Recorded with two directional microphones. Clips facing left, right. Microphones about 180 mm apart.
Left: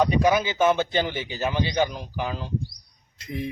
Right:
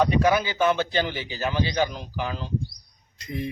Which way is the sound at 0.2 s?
15° left (ahead or behind).